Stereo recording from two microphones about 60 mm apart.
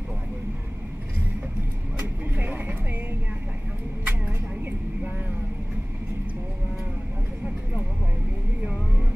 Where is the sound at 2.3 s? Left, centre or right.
Right.